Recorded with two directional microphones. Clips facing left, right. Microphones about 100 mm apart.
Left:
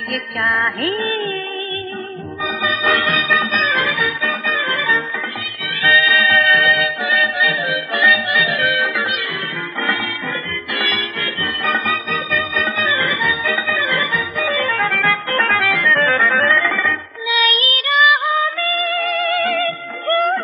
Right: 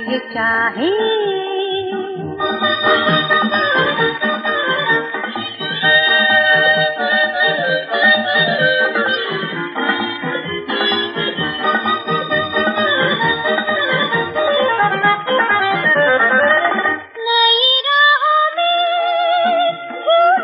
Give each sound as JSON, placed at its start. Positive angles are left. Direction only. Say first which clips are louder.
{"t": 0.1, "sound": "music", "louder": "right 3 dB", "side_deg": -25}
{"t": 11.6, "sound": "music", "louder": "right 4 dB", "side_deg": -20}